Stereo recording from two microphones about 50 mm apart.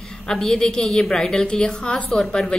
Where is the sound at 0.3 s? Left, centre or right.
Centre.